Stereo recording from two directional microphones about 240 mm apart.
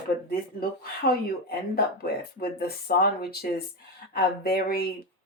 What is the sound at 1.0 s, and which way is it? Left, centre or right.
Speech, left.